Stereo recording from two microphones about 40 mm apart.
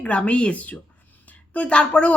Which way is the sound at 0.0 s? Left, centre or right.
Left.